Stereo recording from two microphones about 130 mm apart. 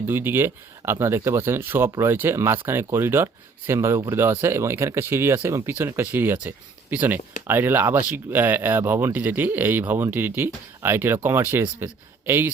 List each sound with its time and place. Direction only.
0.0 s speech: 15° right (ahead or behind)